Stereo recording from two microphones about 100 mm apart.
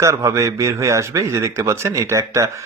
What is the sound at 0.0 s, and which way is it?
A man's voice, 30° right (ahead or behind).